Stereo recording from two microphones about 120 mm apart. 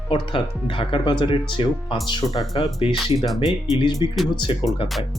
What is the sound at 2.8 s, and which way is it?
Speech, 50° left (ahead or behind).